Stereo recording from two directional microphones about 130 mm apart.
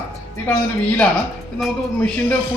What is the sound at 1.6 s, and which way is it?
Speech, 5° left (ahead or behind).